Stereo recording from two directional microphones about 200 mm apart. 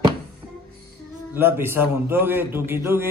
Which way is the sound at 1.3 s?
10° right (ahead or behind).